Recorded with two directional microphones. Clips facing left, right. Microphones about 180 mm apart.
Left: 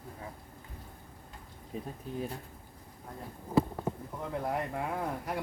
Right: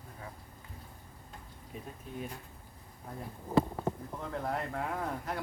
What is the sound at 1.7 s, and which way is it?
Speech, 35° left (ahead or behind).